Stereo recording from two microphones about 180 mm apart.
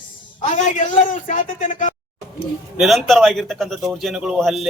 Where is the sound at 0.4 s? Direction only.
45° left (ahead or behind).